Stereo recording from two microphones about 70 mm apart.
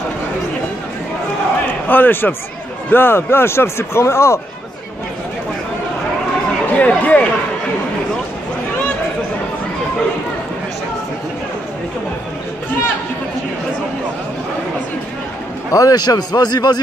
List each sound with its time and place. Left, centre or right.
1.7 s a man's voice: left
6.8 s speech: left
15.7 s a man's voice: left
16.0 s speech: left